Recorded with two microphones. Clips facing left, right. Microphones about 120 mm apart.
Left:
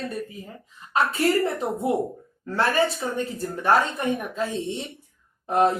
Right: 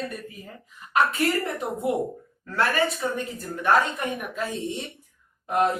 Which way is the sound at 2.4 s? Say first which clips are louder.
Left 2 dB; 30° left (ahead or behind).